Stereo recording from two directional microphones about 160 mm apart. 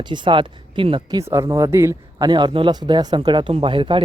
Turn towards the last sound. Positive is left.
turn(degrees=-30)  # may be behind; listen again after turning